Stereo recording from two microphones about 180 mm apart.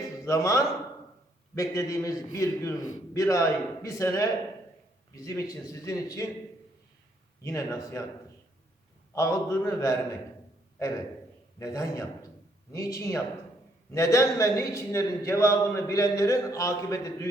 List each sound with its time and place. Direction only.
0.3 s a man's voice: 15° left (ahead or behind)
7.4 s a man's voice: 15° left (ahead or behind)
9.1 s a man's voice: 15° left (ahead or behind)
11.6 s a man's voice: 20° left (ahead or behind)